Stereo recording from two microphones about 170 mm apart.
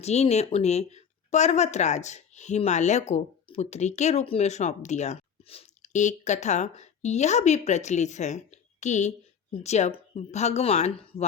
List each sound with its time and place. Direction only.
0.0 s speech: 40° left (ahead or behind)